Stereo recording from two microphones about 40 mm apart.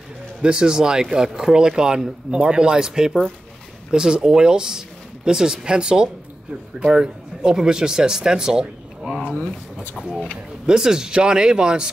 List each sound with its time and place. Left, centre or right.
0.4 s speech: right
10.7 s speech: centre